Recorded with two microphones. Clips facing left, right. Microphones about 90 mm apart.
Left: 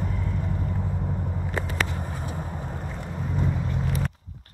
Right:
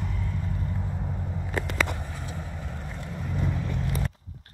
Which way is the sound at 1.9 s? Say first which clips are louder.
Left 4 dB; 40° left (ahead or behind).